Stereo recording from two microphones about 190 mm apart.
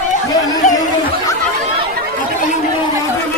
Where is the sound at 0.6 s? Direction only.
40° left (ahead or behind).